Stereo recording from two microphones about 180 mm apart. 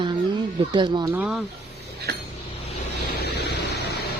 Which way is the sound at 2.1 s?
65° right (ahead or behind).